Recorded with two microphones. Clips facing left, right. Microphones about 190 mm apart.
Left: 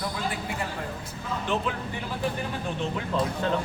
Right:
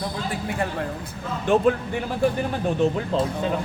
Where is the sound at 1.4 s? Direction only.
50° right (ahead or behind).